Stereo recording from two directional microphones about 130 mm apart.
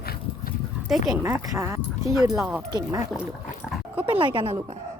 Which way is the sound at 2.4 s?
10° right (ahead or behind).